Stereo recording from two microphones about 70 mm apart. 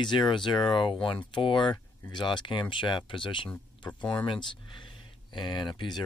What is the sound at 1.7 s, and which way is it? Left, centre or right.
Speech, left.